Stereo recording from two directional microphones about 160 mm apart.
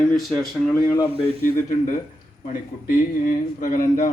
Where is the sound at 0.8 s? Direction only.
20° left (ahead or behind).